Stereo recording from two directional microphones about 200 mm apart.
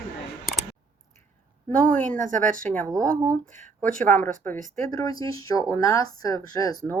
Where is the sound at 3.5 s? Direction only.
40° right (ahead or behind).